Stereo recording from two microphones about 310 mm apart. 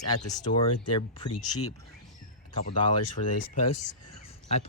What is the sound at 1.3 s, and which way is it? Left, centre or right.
Speech, left.